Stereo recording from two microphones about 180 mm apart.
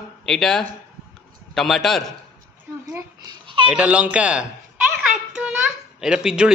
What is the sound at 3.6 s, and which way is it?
Speech, 5° right (ahead or behind).